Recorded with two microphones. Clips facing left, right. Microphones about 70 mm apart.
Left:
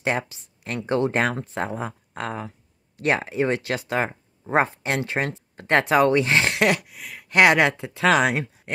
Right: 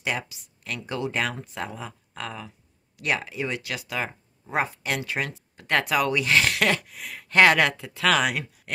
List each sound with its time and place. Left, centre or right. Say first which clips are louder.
0.0 s speech: left 5 dB; left
6.8 s speech: even; centre
7.2 s speech: left 1 dB; centre